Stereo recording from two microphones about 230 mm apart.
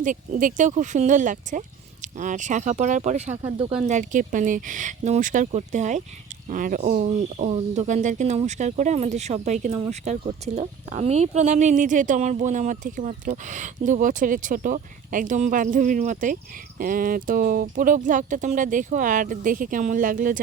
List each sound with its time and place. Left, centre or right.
0.0 s speech: right